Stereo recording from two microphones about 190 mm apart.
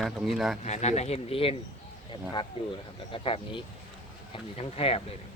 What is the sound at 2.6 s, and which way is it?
Speech, 30° left (ahead or behind).